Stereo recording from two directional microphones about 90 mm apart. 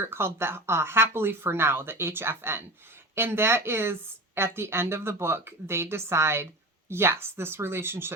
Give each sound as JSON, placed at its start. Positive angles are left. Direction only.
{"t": 0.0, "sound": "speech", "side_deg": -25}